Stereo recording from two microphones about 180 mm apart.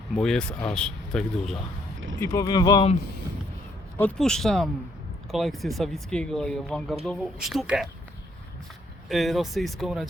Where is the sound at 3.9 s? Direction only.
5° left (ahead or behind).